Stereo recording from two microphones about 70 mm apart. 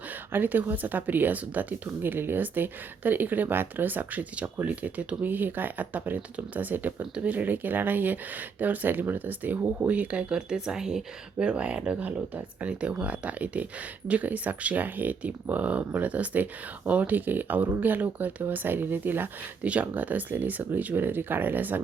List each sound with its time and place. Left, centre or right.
0.3 s speech: right